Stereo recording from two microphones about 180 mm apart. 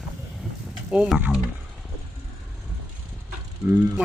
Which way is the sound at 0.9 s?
5° right (ahead or behind).